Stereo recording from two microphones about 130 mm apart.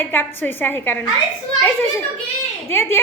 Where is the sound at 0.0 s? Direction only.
15° left (ahead or behind).